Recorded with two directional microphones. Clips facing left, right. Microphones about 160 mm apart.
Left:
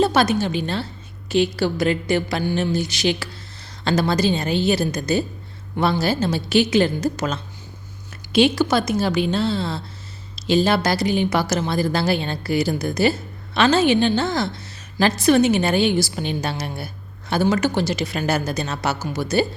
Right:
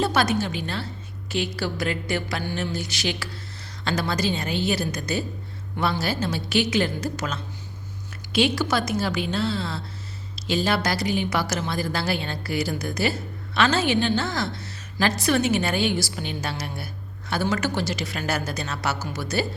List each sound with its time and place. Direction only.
0.0 s a woman's voice: 25° left (ahead or behind)